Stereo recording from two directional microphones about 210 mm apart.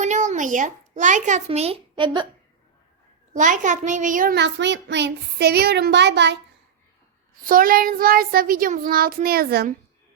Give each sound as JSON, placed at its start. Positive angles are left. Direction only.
{"t": 0.0, "sound": "a child's voice", "side_deg": -35}
{"t": 3.3, "sound": "a child's voice", "side_deg": -35}
{"t": 7.4, "sound": "a child's voice", "side_deg": -40}